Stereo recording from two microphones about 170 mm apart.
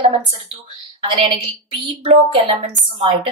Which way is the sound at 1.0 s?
30° right (ahead or behind).